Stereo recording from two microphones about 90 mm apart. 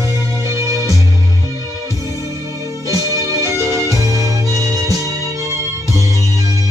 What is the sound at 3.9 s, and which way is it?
Music, 40° right (ahead or behind).